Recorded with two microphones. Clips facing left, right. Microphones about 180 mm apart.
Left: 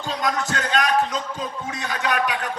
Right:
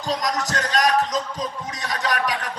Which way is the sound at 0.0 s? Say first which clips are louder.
Even; 40° right (ahead or behind).